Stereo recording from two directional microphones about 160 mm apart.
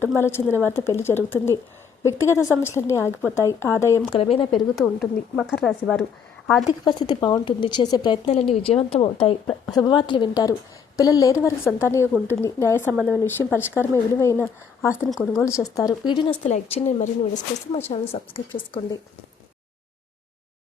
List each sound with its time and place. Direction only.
0.2 s speech: 15° left (ahead or behind)
4.1 s a woman's voice: 35° left (ahead or behind)
4.7 s speech: centre (ahead or behind)
6.8 s speech: 25° left (ahead or behind)
8.3 s a woman's voice: 40° left (ahead or behind)
9.5 s speech: 5° left (ahead or behind)
9.8 s speech: 30° left (ahead or behind)
15.1 s speech: centre (ahead or behind)
15.4 s speech: 20° left (ahead or behind)
16.5 s a woman's voice: 45° left (ahead or behind)